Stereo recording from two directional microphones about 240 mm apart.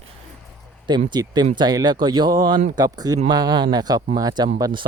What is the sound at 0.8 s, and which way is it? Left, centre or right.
Speech, centre.